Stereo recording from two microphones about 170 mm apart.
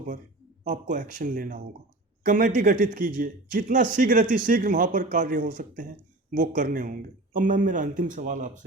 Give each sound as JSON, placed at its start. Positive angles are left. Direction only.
{"t": 0.6, "sound": "a man's voice", "side_deg": -50}